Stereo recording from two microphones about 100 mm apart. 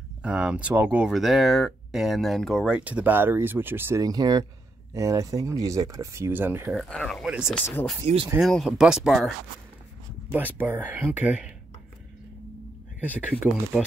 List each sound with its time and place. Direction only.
0.2 s speech: 10° right (ahead or behind)
2.7 s speech: 15° right (ahead or behind)
4.0 s speech: 40° right (ahead or behind); by 6.7 s 20° right (ahead or behind)
6.7 s speech: 5° left (ahead or behind)
7.2 s speech: 10° right (ahead or behind)
7.5 s speech: 20° left (ahead or behind)
8.4 s speech: centre (ahead or behind)
10.3 s speech: 15° right (ahead or behind)
13.3 s speech: 15° right (ahead or behind)